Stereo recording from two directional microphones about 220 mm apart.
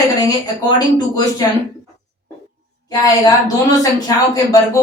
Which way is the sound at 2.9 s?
15° left (ahead or behind).